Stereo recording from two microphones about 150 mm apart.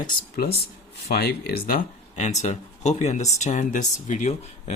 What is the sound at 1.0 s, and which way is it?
Speech, 90° left.